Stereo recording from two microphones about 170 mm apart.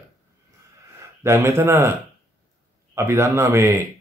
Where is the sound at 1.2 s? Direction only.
15° right (ahead or behind).